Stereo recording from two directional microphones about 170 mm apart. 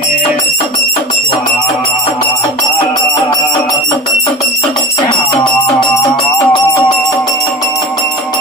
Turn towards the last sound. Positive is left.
turn(degrees=20)  # may be behind; listen again after turning